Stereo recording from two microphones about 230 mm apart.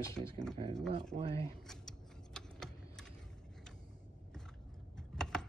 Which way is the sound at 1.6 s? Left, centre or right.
Centre.